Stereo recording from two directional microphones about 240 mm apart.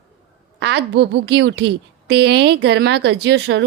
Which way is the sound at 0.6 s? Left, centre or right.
Right.